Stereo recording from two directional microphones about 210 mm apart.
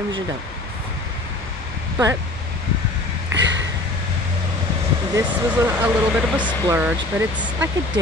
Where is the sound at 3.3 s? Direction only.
60° right (ahead or behind).